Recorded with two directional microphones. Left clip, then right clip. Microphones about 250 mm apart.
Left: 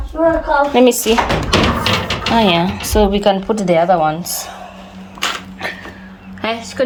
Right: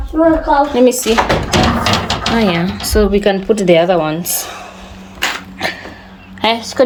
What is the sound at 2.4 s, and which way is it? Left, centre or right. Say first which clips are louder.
Speech: left 2 dB; right.